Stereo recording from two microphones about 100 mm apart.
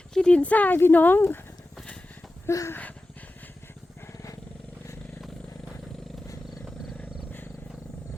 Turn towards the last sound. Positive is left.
turn(degrees=0)  # may be behind; listen again after turning